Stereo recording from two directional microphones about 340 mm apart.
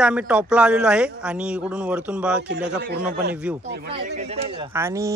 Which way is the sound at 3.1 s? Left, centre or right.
Right.